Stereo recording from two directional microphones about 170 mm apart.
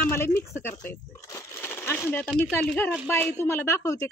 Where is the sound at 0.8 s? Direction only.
15° left (ahead or behind).